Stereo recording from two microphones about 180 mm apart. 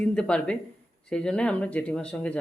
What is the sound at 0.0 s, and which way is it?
Speech, 5° left (ahead or behind).